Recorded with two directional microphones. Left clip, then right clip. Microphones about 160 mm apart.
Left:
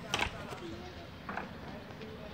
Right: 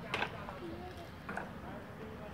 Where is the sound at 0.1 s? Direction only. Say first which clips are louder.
Left 3 dB; 60° right (ahead or behind).